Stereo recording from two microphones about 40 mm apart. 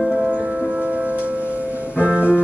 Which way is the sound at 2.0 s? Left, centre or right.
Right.